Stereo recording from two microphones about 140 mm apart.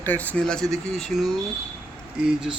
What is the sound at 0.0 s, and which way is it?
Speech, 10° left (ahead or behind).